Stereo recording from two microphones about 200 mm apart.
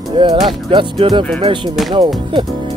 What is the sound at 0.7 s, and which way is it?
Speech, 25° right (ahead or behind).